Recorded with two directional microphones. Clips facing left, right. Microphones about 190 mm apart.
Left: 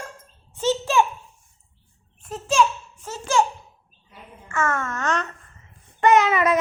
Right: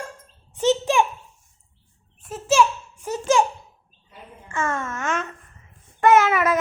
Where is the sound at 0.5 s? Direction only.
15° right (ahead or behind).